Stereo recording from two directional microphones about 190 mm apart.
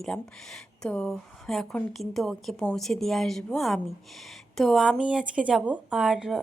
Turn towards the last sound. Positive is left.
turn(degrees=-5)  # may be behind; listen again after turning